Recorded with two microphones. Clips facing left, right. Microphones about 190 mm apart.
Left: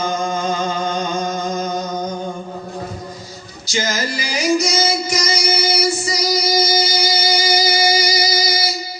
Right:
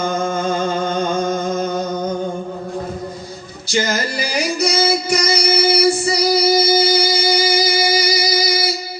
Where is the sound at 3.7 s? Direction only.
60° right (ahead or behind).